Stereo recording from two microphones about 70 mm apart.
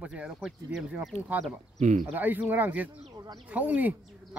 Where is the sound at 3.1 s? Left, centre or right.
Right.